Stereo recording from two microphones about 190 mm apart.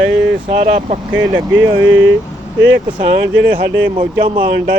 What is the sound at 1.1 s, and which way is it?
Speech, 20° right (ahead or behind).